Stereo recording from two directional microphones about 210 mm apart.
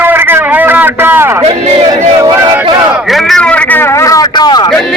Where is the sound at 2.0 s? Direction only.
20° right (ahead or behind).